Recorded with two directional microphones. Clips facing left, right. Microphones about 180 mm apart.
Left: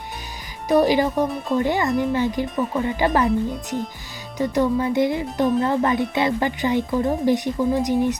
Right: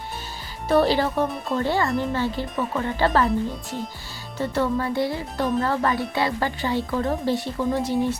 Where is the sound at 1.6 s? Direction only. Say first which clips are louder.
Left 2 dB; 15° left (ahead or behind).